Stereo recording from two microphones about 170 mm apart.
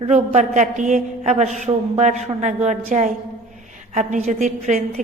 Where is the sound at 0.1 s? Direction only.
45° right (ahead or behind).